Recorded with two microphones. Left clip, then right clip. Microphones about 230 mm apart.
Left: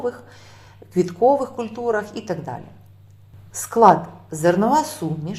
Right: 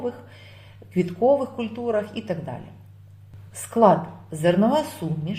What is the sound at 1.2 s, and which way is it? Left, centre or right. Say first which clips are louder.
Speech: left 2 dB; centre.